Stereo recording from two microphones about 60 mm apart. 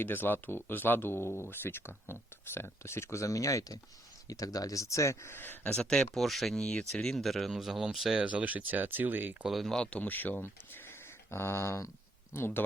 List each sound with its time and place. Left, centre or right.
0.0 s speech: left
5.7 s speech: centre
6.6 s speech: centre
8.2 s speech: right
9.5 s speech: centre
9.7 s speech: centre
10.0 s speech: left
11.3 s speech: left